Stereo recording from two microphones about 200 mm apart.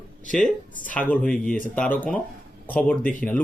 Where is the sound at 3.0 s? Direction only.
45° left (ahead or behind).